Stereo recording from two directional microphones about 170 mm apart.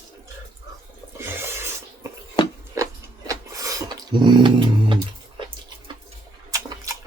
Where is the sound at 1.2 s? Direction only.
15° right (ahead or behind).